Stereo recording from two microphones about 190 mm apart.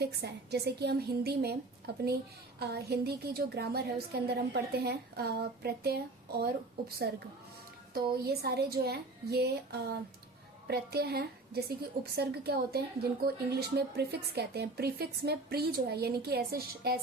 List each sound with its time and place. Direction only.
0.0 s a woman's voice: 60° right (ahead or behind)
8.1 s a woman's voice: 55° right (ahead or behind)